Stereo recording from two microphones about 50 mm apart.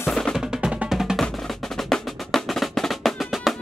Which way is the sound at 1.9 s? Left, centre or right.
Centre.